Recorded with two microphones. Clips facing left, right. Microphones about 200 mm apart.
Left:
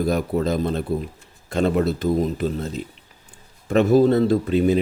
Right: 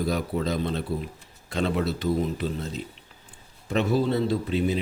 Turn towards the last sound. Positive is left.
turn(degrees=50)  # may be behind; listen again after turning